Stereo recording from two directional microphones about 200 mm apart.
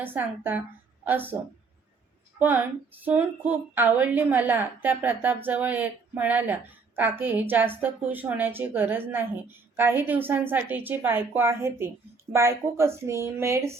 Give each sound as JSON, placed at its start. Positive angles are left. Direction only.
{"t": 0.0, "sound": "a woman's voice", "side_deg": -10}
{"t": 2.4, "sound": "a woman's voice", "side_deg": -10}